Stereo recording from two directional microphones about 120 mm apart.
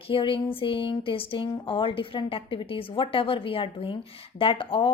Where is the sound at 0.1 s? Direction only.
45° left (ahead or behind).